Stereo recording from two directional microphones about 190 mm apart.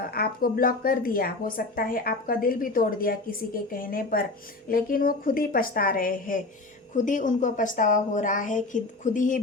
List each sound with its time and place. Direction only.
0.1 s speech: 50° left (ahead or behind)